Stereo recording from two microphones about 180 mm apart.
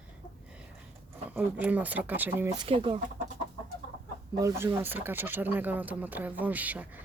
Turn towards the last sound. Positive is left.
turn(degrees=-10)  # may be behind; listen again after turning